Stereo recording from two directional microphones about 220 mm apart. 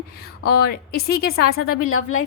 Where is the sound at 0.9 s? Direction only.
45° left (ahead or behind).